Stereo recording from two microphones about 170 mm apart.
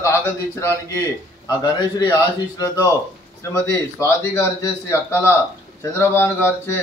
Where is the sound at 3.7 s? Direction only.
20° left (ahead or behind).